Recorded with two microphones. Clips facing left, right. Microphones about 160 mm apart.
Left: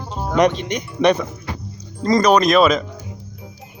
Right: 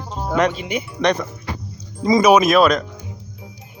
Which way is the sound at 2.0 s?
5° right (ahead or behind).